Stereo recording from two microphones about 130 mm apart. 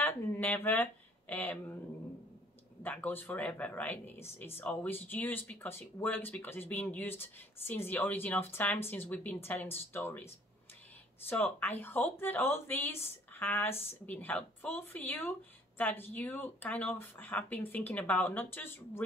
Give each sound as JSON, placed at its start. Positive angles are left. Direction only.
{"t": 0.0, "sound": "speech", "side_deg": 15}
{"t": 2.8, "sound": "speech", "side_deg": 15}